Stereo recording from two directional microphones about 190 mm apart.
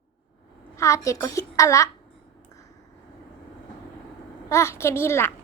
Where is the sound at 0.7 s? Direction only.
15° left (ahead or behind).